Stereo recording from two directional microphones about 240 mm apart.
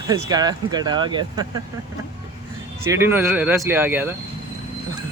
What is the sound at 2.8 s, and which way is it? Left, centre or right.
Speech, centre.